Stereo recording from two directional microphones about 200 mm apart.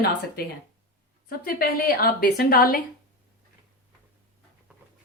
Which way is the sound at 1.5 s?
45° left (ahead or behind).